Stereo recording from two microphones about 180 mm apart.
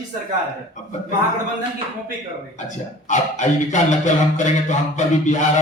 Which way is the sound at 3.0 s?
40° left (ahead or behind).